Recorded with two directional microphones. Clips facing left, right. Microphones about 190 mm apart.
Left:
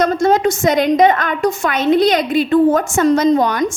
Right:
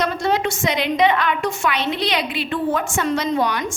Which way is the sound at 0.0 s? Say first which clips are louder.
Left 7 dB; 45° left (ahead or behind).